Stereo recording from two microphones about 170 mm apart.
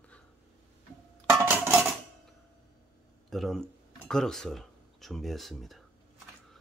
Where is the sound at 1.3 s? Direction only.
10° right (ahead or behind).